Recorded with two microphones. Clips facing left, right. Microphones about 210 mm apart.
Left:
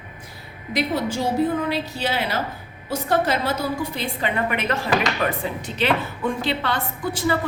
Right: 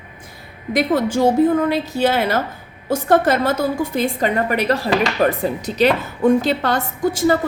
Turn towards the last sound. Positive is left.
turn(degrees=-45)  # may be behind; listen again after turning